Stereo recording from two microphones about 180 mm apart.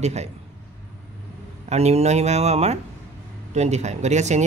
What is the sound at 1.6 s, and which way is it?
Speech, 35° right (ahead or behind).